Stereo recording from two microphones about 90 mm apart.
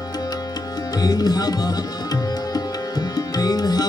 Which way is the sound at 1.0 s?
45° left (ahead or behind).